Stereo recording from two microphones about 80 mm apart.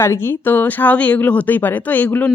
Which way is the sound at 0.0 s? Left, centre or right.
Left.